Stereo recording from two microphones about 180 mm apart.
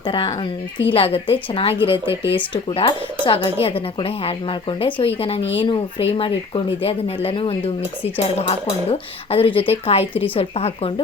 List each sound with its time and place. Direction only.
0.1 s speech: 25° left (ahead or behind)